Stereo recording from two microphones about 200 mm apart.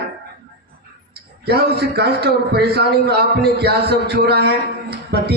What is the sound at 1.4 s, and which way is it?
A man's voice, 55° right (ahead or behind).